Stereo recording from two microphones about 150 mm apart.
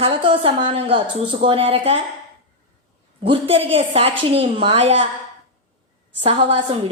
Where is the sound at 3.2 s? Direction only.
40° right (ahead or behind).